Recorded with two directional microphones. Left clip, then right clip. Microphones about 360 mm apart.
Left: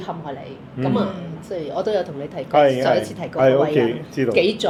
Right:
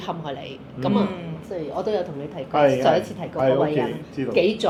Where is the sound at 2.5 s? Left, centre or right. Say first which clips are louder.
Left 2 dB; left.